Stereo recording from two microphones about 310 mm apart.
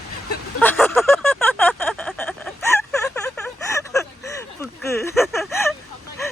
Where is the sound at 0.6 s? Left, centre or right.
Centre.